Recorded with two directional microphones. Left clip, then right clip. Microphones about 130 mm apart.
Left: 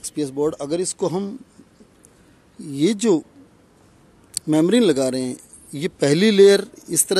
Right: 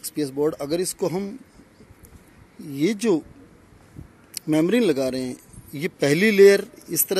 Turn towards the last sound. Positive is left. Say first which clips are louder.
# left 4 dB
turn(degrees=35)  # may be behind; listen again after turning